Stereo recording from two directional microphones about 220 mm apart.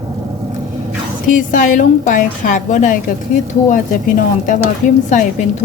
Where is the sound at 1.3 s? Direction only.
35° left (ahead or behind).